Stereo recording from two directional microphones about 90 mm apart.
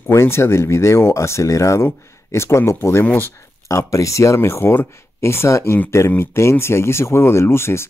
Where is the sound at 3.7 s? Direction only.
35° left (ahead or behind).